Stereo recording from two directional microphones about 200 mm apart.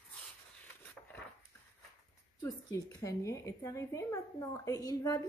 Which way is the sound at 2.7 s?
20° left (ahead or behind).